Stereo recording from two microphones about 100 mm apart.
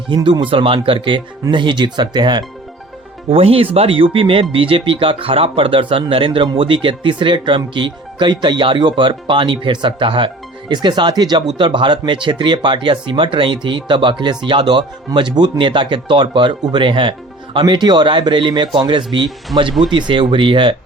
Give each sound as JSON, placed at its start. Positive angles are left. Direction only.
{"t": 0.1, "sound": "speech", "side_deg": -55}
{"t": 3.2, "sound": "speech", "side_deg": -75}
{"t": 17.6, "sound": "speech", "side_deg": -45}